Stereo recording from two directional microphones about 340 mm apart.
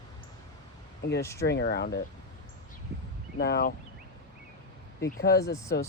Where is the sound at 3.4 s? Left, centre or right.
Left.